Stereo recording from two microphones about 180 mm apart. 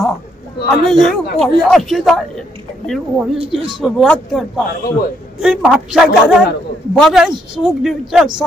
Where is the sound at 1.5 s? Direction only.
Centre (ahead or behind).